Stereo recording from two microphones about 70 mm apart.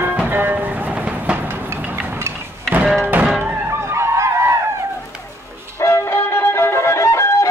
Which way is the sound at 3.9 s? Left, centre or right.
Right.